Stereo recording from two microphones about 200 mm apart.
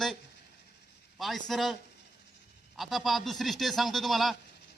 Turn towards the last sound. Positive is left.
turn(degrees=0)  # may be behind; listen again after turning